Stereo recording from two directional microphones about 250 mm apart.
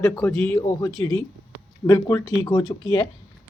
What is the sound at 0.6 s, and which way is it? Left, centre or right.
Speech, centre.